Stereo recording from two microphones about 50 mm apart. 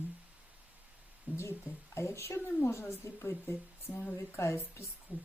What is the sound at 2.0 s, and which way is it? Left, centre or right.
Speech, left.